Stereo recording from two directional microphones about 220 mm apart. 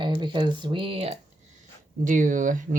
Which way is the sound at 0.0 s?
20° right (ahead or behind).